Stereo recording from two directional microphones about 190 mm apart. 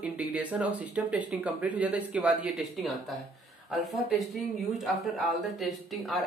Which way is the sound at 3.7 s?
Centre (ahead or behind).